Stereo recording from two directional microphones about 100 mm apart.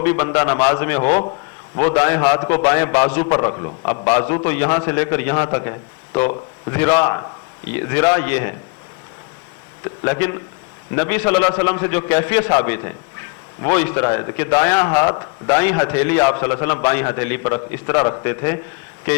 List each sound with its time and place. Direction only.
0.0 s a man's voice: 30° left (ahead or behind)
3.5 s a man's voice: 45° left (ahead or behind)
3.8 s a man's voice: 30° left (ahead or behind)
9.8 s a man's voice: 30° left (ahead or behind)